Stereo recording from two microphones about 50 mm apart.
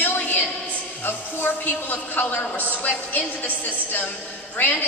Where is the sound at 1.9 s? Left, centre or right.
Left.